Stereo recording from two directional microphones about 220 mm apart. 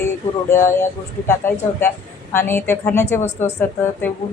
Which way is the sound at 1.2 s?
10° left (ahead or behind).